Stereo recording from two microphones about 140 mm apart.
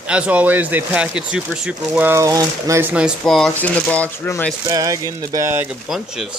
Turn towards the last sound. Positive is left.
turn(degrees=-20)  # may be behind; listen again after turning